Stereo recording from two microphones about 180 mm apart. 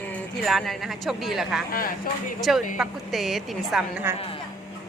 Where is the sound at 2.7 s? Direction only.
Centre (ahead or behind).